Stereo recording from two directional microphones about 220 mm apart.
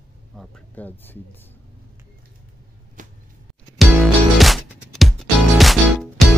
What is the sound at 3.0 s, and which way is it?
Music, 35° right (ahead or behind).